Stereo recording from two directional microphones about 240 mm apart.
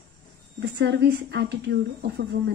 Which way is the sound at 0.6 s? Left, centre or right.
Right.